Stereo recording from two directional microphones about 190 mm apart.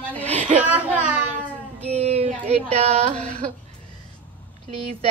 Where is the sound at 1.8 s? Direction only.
35° right (ahead or behind).